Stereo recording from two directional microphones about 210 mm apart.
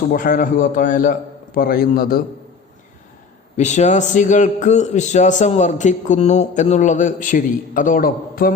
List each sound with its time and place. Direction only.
0.1 s a man's voice: 40° left (ahead or behind)
3.6 s a man's voice: 35° left (ahead or behind)